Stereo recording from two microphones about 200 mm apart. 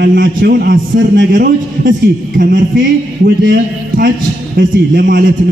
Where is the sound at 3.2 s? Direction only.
55° right (ahead or behind).